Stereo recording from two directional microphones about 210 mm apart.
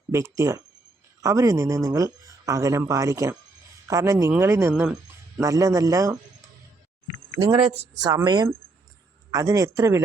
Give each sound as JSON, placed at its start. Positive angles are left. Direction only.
{"t": 0.1, "sound": "speech", "side_deg": -15}
{"t": 7.4, "sound": "speech", "side_deg": -25}